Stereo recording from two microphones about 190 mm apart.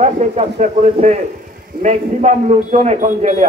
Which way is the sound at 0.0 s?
35° right (ahead or behind).